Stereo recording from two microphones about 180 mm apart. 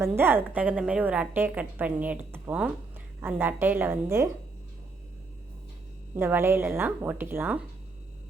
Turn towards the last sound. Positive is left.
turn(degrees=-10)  # may be behind; listen again after turning